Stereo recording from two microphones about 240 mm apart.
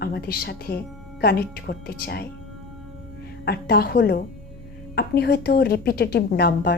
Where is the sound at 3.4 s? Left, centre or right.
Left.